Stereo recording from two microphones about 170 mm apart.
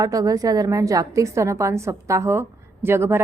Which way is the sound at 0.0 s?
20° right (ahead or behind).